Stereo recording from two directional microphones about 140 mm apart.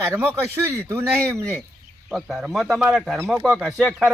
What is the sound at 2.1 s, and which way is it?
Speech, centre (ahead or behind).